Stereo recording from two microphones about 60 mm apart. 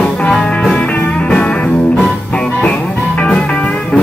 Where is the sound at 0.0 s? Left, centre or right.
Centre.